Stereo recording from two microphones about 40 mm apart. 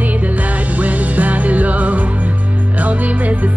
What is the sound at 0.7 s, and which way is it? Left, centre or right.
Music, right.